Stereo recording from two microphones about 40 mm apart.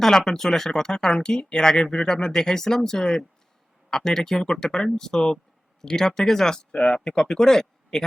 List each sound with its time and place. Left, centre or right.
0.0 s speech: centre; by 7.0 s left
7.1 s speech: centre